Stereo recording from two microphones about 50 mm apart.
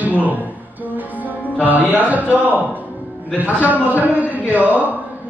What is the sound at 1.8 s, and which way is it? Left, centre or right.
A man's voice, right.